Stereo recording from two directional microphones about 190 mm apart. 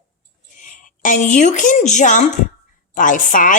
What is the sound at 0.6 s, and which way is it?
A woman's voice, 45° left (ahead or behind).